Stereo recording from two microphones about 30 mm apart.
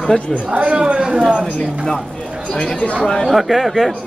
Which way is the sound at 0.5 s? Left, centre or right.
Right.